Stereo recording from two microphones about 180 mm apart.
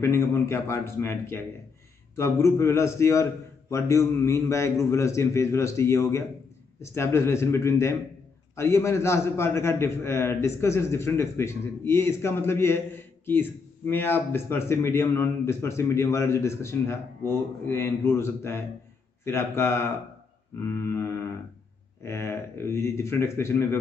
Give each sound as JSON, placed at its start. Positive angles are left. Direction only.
{"t": 0.0, "sound": "a man's voice", "side_deg": 15}